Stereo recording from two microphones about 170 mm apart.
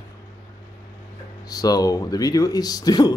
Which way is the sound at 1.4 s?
20° left (ahead or behind).